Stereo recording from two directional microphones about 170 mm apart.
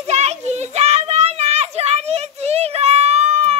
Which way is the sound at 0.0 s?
40° right (ahead or behind).